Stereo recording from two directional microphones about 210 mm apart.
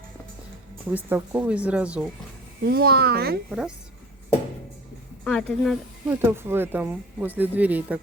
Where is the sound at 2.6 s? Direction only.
50° right (ahead or behind).